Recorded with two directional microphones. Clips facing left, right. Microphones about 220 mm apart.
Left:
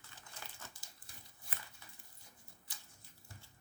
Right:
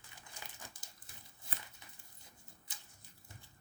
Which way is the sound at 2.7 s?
20° right (ahead or behind).